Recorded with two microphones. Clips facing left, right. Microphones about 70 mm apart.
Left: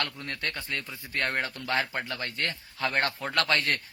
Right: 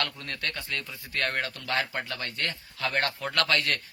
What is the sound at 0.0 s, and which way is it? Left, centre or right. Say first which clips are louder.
A man's voice: even; left.